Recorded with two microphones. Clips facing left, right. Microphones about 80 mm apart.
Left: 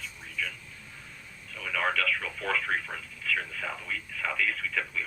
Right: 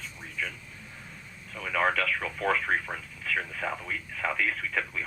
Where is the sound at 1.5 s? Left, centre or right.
Right.